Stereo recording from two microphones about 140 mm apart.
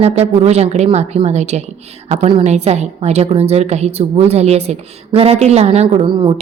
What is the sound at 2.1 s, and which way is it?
A woman's voice, 40° right (ahead or behind).